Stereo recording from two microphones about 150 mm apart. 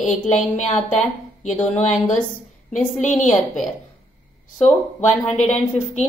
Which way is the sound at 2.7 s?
55° left (ahead or behind).